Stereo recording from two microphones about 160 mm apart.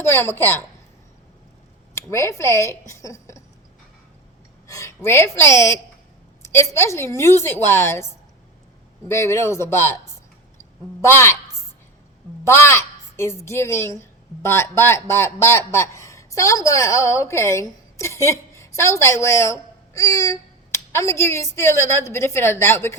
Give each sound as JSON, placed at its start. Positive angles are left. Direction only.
{"t": 0.0, "sound": "a woman's voice", "side_deg": 15}
{"t": 2.0, "sound": "speech", "side_deg": 15}
{"t": 4.7, "sound": "a woman's voice", "side_deg": 20}
{"t": 11.0, "sound": "a woman's voice", "side_deg": 15}
{"t": 12.5, "sound": "a woman's voice", "side_deg": 15}